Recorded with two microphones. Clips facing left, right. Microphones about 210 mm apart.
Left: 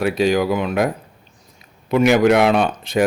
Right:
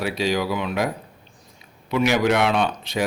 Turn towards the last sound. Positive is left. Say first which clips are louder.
# left 5 dB
turn(degrees=50)  # may be behind; listen again after turning